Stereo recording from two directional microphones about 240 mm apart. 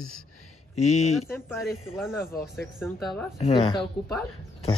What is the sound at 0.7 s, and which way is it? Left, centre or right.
Speech, left.